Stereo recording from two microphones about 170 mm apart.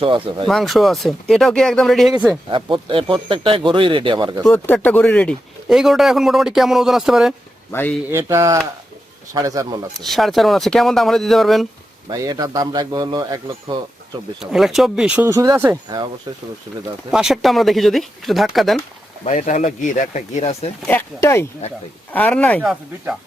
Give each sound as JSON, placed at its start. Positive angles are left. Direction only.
{"t": 0.0, "sound": "speech", "side_deg": -30}
{"t": 0.4, "sound": "speech", "side_deg": 0}
{"t": 2.5, "sound": "speech", "side_deg": -30}
{"t": 4.4, "sound": "speech", "side_deg": 10}
{"t": 7.7, "sound": "speech", "side_deg": 10}
{"t": 8.1, "sound": "speech", "side_deg": -15}
{"t": 10.0, "sound": "speech", "side_deg": 0}
{"t": 12.0, "sound": "speech", "side_deg": -20}
{"t": 14.5, "sound": "speech", "side_deg": 0}
{"t": 15.3, "sound": "speech", "side_deg": -20}
{"t": 17.1, "sound": "speech", "side_deg": -5}
{"t": 19.2, "sound": "speech", "side_deg": 45}
{"t": 20.8, "sound": "speech", "side_deg": 15}